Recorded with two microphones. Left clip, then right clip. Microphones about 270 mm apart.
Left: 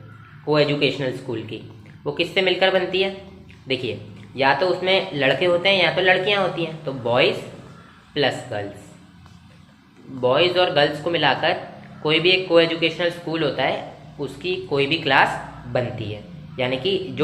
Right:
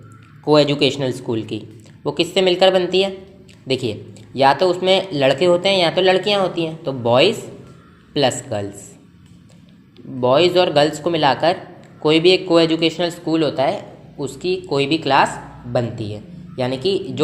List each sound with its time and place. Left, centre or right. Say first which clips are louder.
0.4 s speech: right 4 dB; right
4.4 s speech: right 4 dB; right
10.2 s speech: right 3 dB; right